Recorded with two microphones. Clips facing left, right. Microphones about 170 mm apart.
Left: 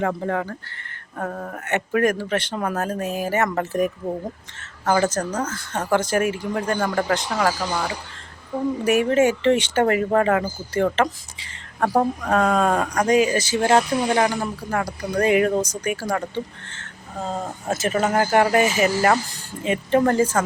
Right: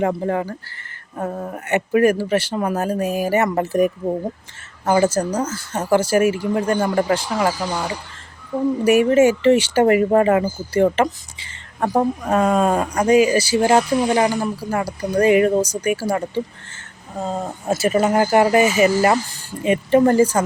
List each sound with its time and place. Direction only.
0.3 s speech: 10° right (ahead or behind)
4.9 s speech: 10° right (ahead or behind)
8.8 s speech: 10° right (ahead or behind)
10.8 s speech: 20° right (ahead or behind)
11.3 s a woman's voice: centre (ahead or behind)